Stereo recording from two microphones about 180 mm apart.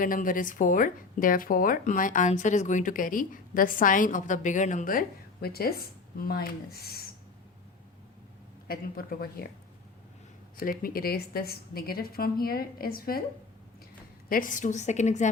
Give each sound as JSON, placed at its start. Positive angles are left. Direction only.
{"t": 0.0, "sound": "speech", "side_deg": 50}
{"t": 8.6, "sound": "a woman's voice", "side_deg": 55}
{"t": 10.6, "sound": "a woman's voice", "side_deg": 50}
{"t": 14.3, "sound": "a woman's voice", "side_deg": 50}